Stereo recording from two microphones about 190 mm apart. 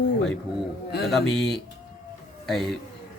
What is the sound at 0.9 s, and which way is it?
Speech, 55° left (ahead or behind).